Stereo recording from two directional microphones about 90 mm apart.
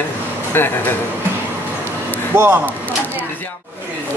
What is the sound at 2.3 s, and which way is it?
Speech, 20° right (ahead or behind).